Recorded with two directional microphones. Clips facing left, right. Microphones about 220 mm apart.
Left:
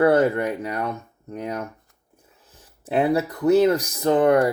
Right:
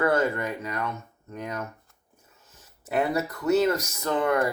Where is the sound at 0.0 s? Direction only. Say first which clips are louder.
Left 6 dB; 35° left (ahead or behind).